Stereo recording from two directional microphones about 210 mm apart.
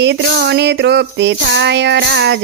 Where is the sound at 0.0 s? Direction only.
55° right (ahead or behind).